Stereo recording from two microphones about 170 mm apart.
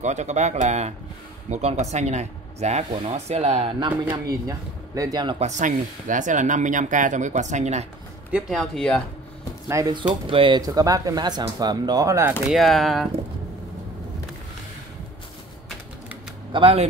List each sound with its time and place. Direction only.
0.0 s speech: 40° right (ahead or behind)
4.5 s speech: 20° right (ahead or behind)
5.4 s speech: 45° right (ahead or behind)
8.3 s speech: 5° right (ahead or behind)
9.7 s speech: 20° right (ahead or behind)
12.4 s speech: centre (ahead or behind)
16.5 s speech: 30° right (ahead or behind)